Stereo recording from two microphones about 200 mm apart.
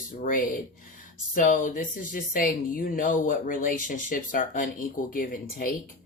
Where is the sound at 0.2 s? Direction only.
45° left (ahead or behind).